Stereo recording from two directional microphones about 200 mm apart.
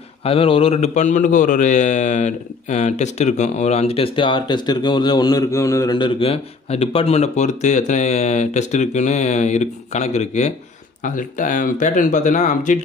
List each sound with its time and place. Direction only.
0.2 s a man's voice: 30° left (ahead or behind)